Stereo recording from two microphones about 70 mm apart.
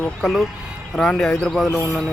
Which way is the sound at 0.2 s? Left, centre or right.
Centre.